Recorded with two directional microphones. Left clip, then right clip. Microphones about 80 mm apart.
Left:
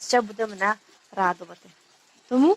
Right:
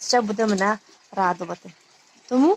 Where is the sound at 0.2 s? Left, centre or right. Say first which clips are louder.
Right 3 dB; right.